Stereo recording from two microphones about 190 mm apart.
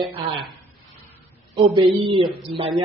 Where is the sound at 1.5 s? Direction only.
25° right (ahead or behind).